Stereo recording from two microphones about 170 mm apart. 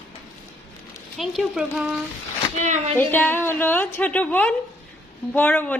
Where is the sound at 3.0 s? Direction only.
10° left (ahead or behind).